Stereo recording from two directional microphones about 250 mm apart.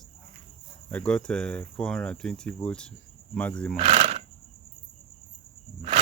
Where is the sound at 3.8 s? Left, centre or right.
Right.